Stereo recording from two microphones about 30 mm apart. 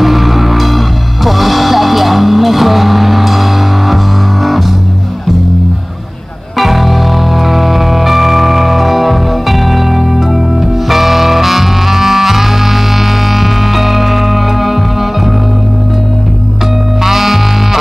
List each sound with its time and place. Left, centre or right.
0.0 s music: centre
6.6 s music: centre
17.0 s music: centre